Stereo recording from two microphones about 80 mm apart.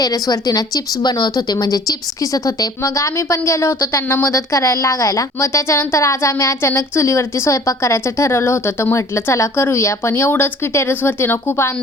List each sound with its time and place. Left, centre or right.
0.0 s a woman's voice: left